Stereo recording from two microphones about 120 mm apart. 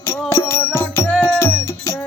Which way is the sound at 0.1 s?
20° left (ahead or behind).